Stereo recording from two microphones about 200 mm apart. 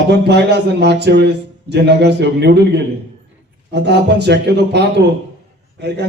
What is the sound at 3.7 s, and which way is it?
A man's voice, 55° right (ahead or behind).